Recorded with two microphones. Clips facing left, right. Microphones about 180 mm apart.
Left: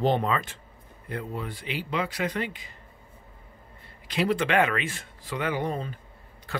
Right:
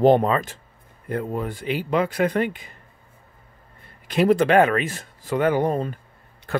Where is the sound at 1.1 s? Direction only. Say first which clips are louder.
Right 7 dB; 45° right (ahead or behind).